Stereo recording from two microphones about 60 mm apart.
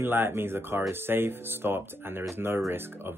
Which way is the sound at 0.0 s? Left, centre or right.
Right.